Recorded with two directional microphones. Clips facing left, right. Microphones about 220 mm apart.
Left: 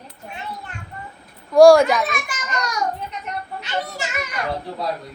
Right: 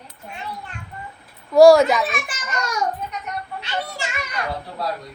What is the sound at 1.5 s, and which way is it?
Speech, centre (ahead or behind).